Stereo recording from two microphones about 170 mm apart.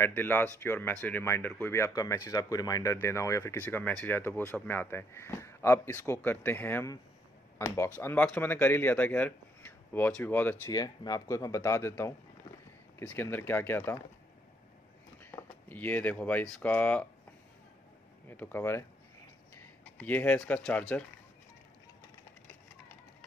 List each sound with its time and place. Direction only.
0.0 s speech: 10° left (ahead or behind)
10.7 s speech: 20° left (ahead or behind)
15.3 s speech: 10° left (ahead or behind)
18.3 s speech: 10° left (ahead or behind)